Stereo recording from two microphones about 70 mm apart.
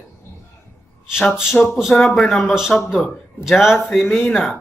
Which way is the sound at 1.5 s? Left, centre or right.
Left.